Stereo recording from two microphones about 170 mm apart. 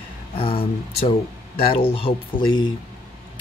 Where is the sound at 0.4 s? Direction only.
30° left (ahead or behind).